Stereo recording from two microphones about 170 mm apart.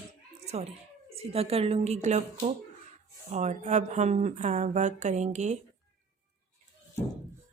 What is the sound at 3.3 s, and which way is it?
Speech, 45° right (ahead or behind).